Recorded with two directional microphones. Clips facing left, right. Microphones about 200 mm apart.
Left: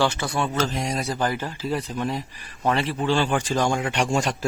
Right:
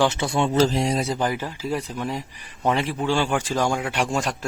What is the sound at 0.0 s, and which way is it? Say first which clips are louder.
Speech: right 2 dB; 20° right (ahead or behind).